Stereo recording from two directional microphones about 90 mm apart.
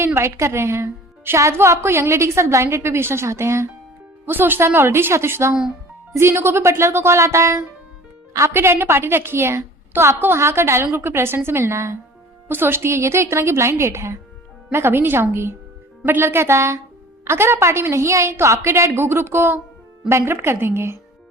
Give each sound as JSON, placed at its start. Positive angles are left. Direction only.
{"t": 0.0, "sound": "a woman's voice", "side_deg": -30}